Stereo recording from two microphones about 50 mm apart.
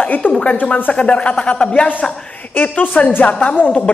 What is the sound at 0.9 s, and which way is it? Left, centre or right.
Speech, left.